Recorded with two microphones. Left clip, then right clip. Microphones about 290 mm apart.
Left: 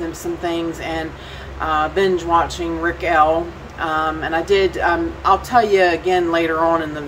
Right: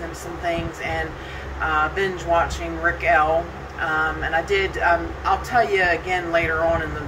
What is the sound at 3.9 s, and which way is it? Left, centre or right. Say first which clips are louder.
Speech: left 2 dB; left.